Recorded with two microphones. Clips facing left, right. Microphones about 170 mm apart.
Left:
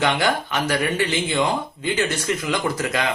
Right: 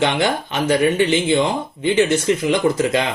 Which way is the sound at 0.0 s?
25° right (ahead or behind).